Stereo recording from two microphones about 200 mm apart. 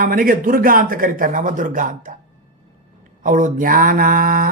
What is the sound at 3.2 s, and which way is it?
Speech, 40° right (ahead or behind).